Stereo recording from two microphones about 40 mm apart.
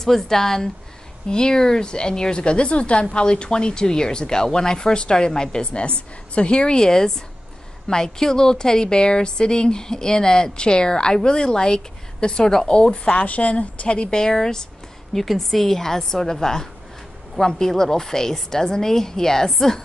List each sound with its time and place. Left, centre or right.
0.0 s a woman's voice: centre
13.1 s a woman's voice: left
14.2 s a woman's voice: centre